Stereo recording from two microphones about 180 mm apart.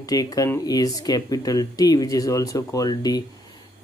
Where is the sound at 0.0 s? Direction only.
20° left (ahead or behind).